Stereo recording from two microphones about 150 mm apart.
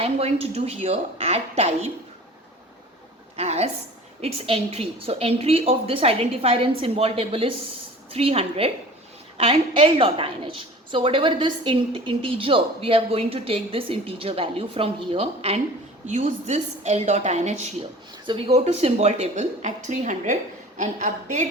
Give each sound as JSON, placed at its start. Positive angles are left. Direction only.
{"t": 0.0, "sound": "a woman's voice", "side_deg": -40}
{"t": 3.3, "sound": "a woman's voice", "side_deg": -45}
{"t": 18.3, "sound": "a woman's voice", "side_deg": -40}